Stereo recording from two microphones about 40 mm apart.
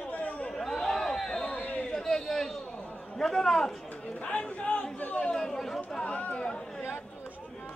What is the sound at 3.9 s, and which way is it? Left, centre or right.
A man's voice, left.